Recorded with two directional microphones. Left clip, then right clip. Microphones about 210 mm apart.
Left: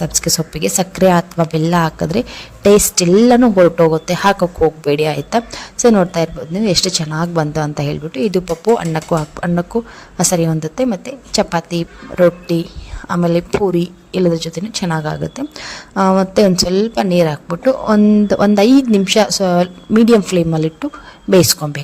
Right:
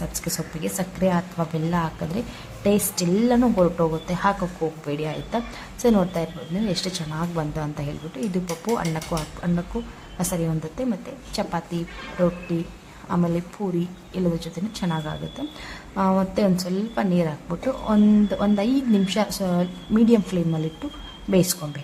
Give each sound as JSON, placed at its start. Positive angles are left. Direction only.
{"t": 0.0, "sound": "speech", "side_deg": 40}
{"t": 13.1, "sound": "speech", "side_deg": 40}